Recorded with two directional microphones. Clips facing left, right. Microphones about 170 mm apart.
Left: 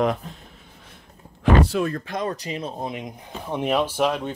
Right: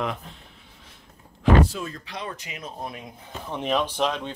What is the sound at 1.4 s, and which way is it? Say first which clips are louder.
Speech: left 1 dB; 65° left (ahead or behind).